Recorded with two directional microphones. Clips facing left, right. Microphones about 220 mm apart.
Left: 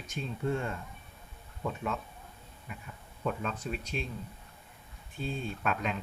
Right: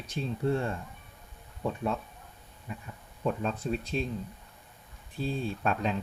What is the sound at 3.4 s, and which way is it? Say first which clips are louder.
Speech: right 5 dB; 35° right (ahead or behind).